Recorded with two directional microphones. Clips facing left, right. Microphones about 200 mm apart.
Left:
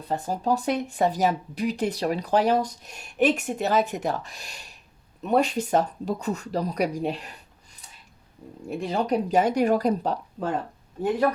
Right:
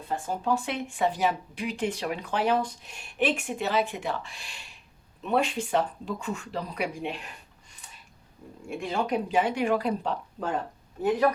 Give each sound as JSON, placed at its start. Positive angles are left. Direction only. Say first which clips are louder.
{"t": 0.1, "sound": "speech", "louder": "left 3 dB", "side_deg": 40}
{"t": 8.7, "sound": "speech", "louder": "left 3 dB", "side_deg": 35}